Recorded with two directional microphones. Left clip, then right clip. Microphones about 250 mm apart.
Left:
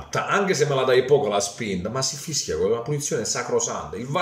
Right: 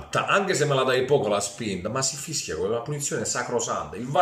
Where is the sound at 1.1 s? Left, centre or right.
Centre.